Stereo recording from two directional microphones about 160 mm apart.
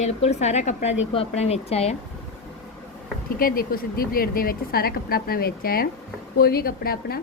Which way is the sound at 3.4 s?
65° left (ahead or behind).